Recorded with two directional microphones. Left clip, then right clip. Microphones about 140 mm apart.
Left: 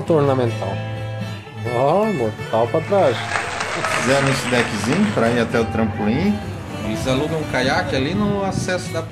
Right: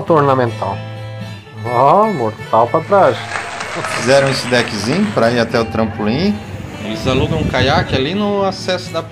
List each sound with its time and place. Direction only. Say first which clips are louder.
0.1 s speech: right 5 dB; centre (ahead or behind)
6.9 s speech: right 4 dB; centre (ahead or behind)